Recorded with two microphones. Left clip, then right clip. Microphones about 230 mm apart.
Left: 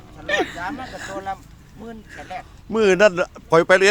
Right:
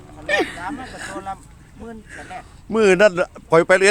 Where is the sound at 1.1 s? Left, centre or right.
Centre.